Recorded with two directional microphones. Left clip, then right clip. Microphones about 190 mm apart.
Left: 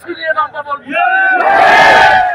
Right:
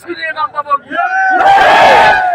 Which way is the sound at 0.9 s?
25° right (ahead or behind).